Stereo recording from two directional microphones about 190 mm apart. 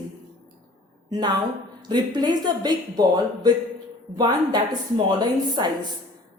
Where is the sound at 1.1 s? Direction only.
20° right (ahead or behind).